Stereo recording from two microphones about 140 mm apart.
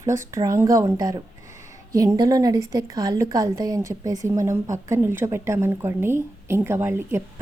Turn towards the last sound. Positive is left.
turn(degrees=-20)  # may be behind; listen again after turning